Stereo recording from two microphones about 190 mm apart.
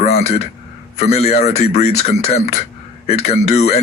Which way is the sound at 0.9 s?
35° left (ahead or behind).